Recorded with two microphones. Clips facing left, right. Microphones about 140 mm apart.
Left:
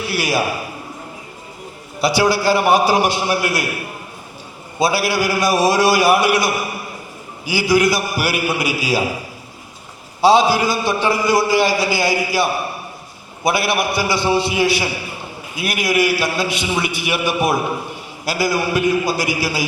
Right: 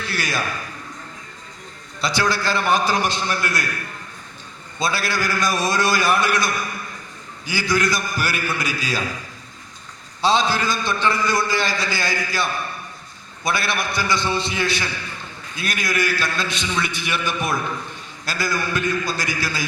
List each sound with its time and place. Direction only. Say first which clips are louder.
0.0 s a man's voice: left 6 dB; 10° left (ahead or behind)
2.0 s a man's voice: left 6 dB; 10° left (ahead or behind)